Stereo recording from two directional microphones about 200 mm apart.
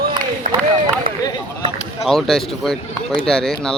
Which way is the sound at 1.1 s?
45° right (ahead or behind).